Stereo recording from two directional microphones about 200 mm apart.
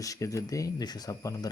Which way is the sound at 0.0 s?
15° left (ahead or behind).